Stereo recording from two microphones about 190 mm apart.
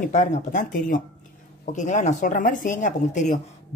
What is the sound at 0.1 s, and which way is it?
Speech, 40° left (ahead or behind).